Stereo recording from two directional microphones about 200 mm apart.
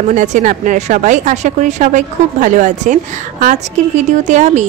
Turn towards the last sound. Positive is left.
turn(degrees=-35)  # may be behind; listen again after turning